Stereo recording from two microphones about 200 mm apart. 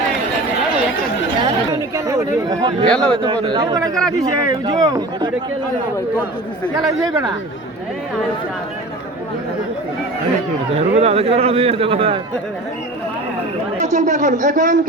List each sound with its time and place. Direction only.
1.4 s chatter: 20° right (ahead or behind)
2.8 s speech: 5° left (ahead or behind)
3.5 s speech: 20° right (ahead or behind)
6.7 s speech: 20° right (ahead or behind)
10.8 s a man's voice: 30° right (ahead or behind)
13.7 s a man's voice: 35° right (ahead or behind)